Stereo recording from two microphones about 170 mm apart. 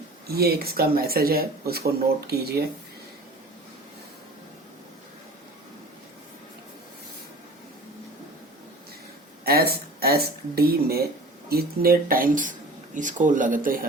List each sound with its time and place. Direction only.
0.3 s speech: 65° right (ahead or behind)
9.4 s speech: 65° right (ahead or behind)